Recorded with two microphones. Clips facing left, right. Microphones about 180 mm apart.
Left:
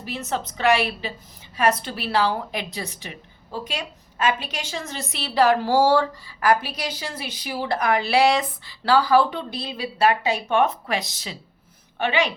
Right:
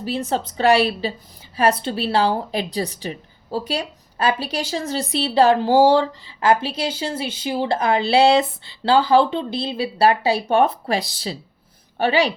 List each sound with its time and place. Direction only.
0.0 s a woman's voice: 30° right (ahead or behind)